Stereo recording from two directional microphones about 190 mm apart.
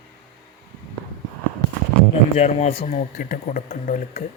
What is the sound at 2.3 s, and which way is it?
Speech, 35° left (ahead or behind).